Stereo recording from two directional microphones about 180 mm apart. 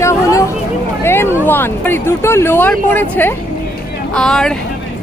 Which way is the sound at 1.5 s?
10° left (ahead or behind).